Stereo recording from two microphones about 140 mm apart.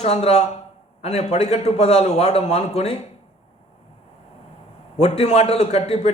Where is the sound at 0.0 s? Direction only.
50° left (ahead or behind).